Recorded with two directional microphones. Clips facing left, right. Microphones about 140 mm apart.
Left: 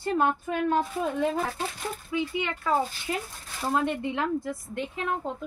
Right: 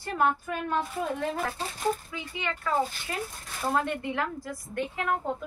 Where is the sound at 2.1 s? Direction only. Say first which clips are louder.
Left 6 dB; 20° left (ahead or behind).